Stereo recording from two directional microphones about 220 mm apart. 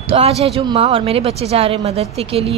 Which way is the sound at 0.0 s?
25° right (ahead or behind).